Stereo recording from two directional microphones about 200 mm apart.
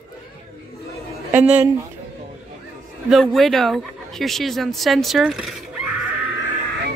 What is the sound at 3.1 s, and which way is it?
Speech, centre (ahead or behind).